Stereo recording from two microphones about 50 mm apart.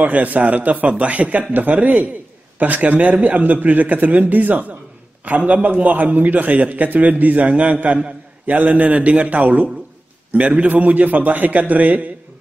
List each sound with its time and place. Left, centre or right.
0.0 s a man's voice: right